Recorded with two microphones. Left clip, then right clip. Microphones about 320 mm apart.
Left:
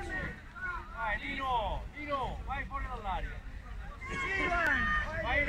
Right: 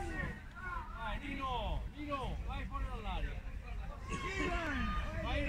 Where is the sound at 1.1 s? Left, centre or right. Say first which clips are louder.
Left 8 dB; left.